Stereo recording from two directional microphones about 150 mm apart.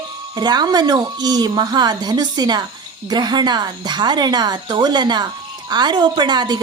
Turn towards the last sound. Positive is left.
turn(degrees=-30)  # may be behind; listen again after turning